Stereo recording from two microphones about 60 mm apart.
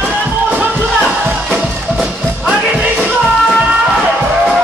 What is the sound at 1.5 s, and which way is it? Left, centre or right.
Music, centre.